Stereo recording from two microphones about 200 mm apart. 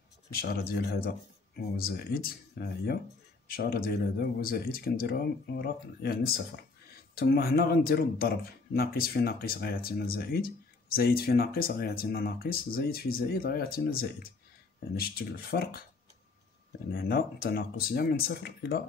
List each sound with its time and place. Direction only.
0.3 s speech: 50° left (ahead or behind)
16.9 s speech: 50° left (ahead or behind)